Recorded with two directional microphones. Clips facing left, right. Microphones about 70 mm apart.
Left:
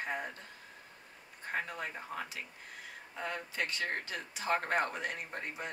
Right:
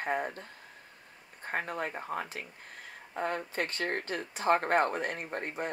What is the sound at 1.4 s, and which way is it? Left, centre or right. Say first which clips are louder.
Speech: right 4 dB; right.